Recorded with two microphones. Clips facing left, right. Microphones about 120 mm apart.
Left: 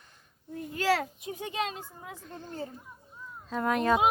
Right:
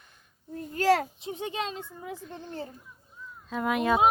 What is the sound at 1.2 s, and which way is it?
Speech, 25° right (ahead or behind).